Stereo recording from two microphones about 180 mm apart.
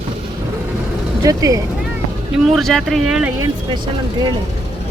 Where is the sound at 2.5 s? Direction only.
Centre (ahead or behind).